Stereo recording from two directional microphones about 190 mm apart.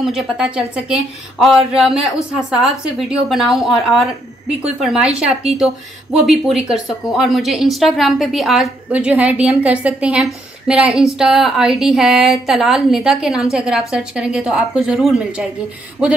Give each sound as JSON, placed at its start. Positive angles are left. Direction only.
{"t": 0.0, "sound": "a woman's voice", "side_deg": -5}